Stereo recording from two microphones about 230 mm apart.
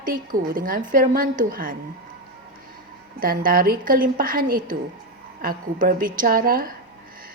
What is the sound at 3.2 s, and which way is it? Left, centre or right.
A woman's voice, right.